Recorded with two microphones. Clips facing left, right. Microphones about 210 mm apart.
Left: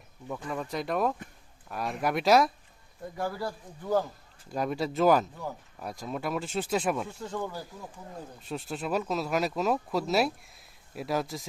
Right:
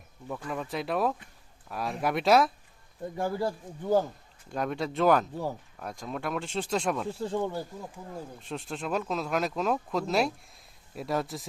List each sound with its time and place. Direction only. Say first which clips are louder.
0.4 s speech: even; centre (ahead or behind)
3.2 s a man's voice: right 3 dB; 25° right (ahead or behind)
4.5 s speech: left 1 dB; 5° left (ahead or behind)
7.1 s a man's voice: right 5 dB; 30° right (ahead or behind)
8.4 s speech: left 3 dB; centre (ahead or behind)